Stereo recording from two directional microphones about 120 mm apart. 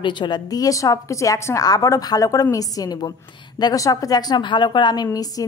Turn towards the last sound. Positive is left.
turn(degrees=30)  # may be behind; listen again after turning